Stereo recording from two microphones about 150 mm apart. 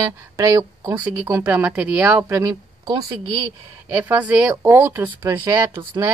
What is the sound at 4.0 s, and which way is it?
Speech, 10° right (ahead or behind).